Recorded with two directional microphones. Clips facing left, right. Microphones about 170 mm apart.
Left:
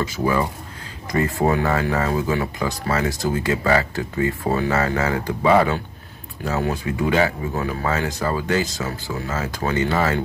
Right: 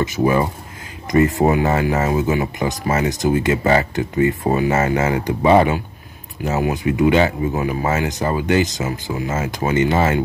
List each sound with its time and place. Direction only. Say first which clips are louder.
0.0 s speech: right 4 dB; 20° right (ahead or behind)